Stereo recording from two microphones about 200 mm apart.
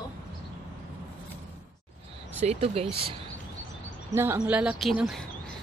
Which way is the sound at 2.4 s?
30° right (ahead or behind).